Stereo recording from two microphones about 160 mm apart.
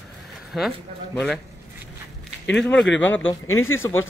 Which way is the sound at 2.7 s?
10° left (ahead or behind).